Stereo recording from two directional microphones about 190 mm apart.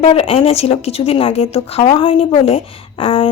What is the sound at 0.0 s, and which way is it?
A woman's voice, 30° left (ahead or behind).